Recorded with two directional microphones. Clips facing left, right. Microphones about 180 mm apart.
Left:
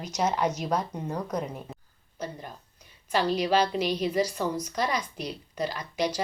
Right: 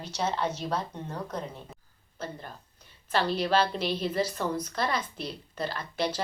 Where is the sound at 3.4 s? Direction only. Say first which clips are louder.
Left 2 dB; 15° left (ahead or behind).